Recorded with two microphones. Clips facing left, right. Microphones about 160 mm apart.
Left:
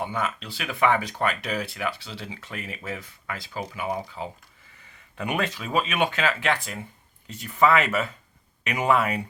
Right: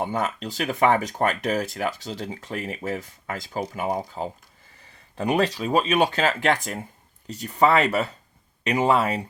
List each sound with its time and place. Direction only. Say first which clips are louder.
0.0 s speech: right 3 dB; 40° right (ahead or behind)